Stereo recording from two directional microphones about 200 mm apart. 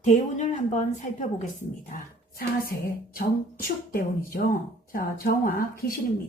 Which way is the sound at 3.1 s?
45° left (ahead or behind).